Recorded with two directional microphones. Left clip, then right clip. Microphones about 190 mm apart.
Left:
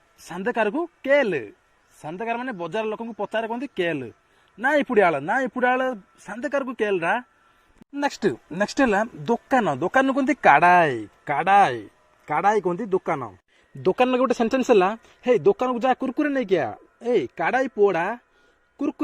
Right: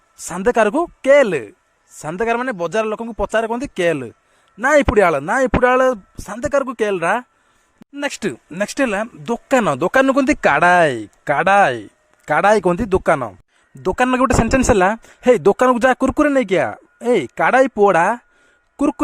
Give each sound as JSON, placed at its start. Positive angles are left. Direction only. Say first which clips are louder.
{"t": 0.3, "sound": "speech", "louder": "right 8 dB", "side_deg": -45}
{"t": 2.0, "sound": "a man's voice", "louder": "right 9 dB", "side_deg": -50}
{"t": 7.9, "sound": "speech", "louder": "right 1 dB", "side_deg": -20}
{"t": 9.5, "sound": "speech", "louder": "right 7 dB", "side_deg": -45}
{"t": 13.8, "sound": "speech", "louder": "right 4 dB", "side_deg": -25}